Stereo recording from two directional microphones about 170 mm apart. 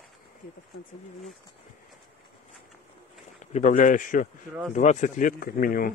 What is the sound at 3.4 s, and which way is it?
Speech, 45° left (ahead or behind).